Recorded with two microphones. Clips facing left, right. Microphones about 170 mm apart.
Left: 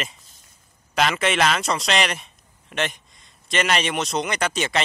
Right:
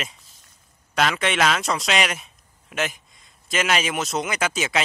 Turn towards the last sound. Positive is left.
turn(degrees=-5)  # may be behind; listen again after turning